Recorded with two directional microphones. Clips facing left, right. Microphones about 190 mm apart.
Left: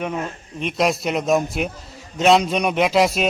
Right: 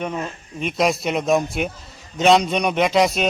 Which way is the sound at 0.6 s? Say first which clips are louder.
Even; centre (ahead or behind).